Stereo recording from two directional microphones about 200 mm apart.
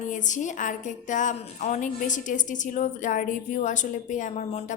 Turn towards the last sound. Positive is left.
turn(degrees=40)  # may be behind; listen again after turning